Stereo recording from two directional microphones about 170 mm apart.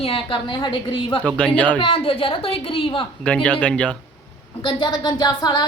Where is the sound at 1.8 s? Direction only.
30° left (ahead or behind).